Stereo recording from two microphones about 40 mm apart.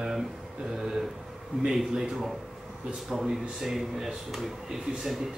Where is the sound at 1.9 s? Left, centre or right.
Centre.